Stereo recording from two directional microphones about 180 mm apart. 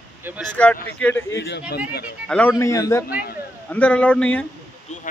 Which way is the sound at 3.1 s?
50° left (ahead or behind).